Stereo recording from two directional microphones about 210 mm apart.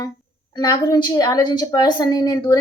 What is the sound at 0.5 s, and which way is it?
A woman's voice, 20° left (ahead or behind).